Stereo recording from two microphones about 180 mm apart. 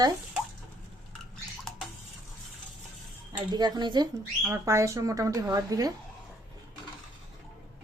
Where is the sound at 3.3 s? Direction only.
25° right (ahead or behind).